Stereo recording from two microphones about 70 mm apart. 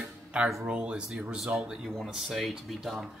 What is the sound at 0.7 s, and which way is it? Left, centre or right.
Speech, centre.